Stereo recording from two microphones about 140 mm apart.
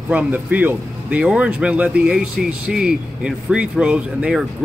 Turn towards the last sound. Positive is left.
turn(degrees=-10)  # may be behind; listen again after turning